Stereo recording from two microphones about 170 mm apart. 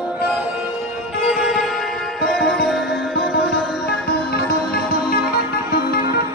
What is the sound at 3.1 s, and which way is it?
Music, 80° left.